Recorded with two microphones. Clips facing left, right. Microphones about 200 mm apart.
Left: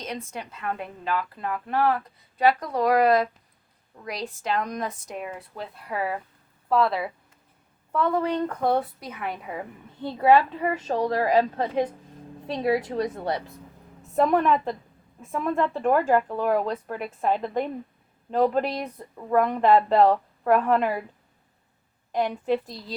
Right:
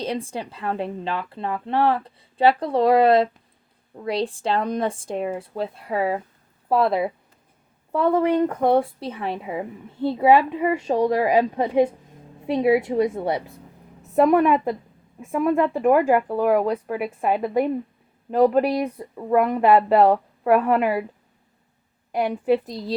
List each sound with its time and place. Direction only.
0.0 s speech: 30° right (ahead or behind)
7.9 s speech: 15° right (ahead or behind)
22.1 s speech: 10° right (ahead or behind)